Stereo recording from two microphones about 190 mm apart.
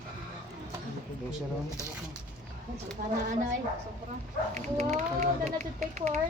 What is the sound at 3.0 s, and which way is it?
Speech, 50° right (ahead or behind).